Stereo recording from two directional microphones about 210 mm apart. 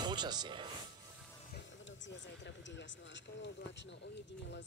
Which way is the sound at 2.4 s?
55° left (ahead or behind).